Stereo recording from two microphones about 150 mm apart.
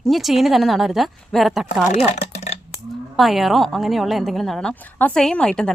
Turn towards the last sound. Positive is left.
turn(degrees=5)  # may be behind; listen again after turning